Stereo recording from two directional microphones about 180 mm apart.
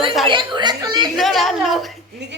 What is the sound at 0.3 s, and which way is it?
Speech, 25° right (ahead or behind).